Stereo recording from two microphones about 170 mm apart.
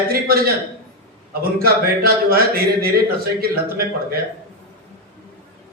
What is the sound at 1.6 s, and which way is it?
A man's voice, 65° right (ahead or behind).